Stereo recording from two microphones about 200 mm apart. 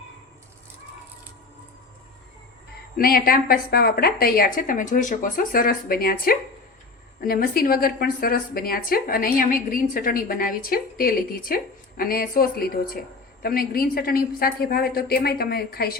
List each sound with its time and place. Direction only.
3.0 s a woman's voice: 45° left (ahead or behind)